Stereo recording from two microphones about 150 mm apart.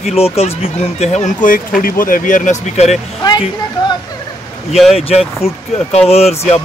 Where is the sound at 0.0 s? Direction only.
40° left (ahead or behind).